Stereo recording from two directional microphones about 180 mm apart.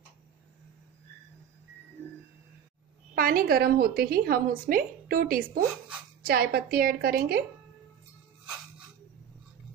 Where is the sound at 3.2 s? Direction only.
50° right (ahead or behind).